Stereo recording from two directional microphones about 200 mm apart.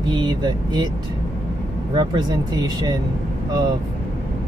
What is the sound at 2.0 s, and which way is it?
Speech, 20° right (ahead or behind).